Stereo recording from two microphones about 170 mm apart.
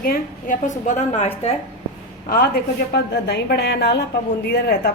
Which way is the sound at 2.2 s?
70° left (ahead or behind).